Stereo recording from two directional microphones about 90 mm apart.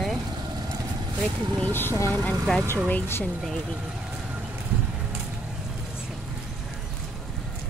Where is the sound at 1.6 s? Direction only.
25° left (ahead or behind).